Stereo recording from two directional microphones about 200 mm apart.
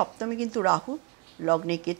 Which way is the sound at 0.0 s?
15° right (ahead or behind).